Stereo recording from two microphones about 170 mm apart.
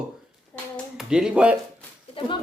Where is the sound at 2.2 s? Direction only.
30° left (ahead or behind).